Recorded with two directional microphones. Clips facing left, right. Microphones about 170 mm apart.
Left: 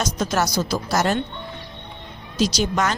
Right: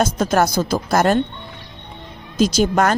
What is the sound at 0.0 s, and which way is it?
A woman's voice, 55° right (ahead or behind).